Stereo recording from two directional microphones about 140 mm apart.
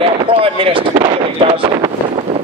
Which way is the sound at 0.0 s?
40° right (ahead or behind).